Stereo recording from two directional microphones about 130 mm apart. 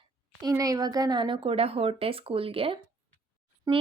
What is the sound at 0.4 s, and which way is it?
A woman's voice, 25° right (ahead or behind).